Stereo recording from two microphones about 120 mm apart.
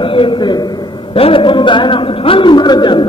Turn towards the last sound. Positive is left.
turn(degrees=40)  # may be behind; listen again after turning